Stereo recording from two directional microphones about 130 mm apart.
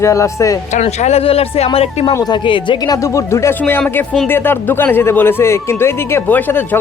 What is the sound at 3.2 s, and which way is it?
Speech, 20° left (ahead or behind).